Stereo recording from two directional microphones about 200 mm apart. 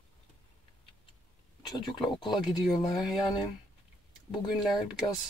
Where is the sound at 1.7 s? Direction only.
25° left (ahead or behind).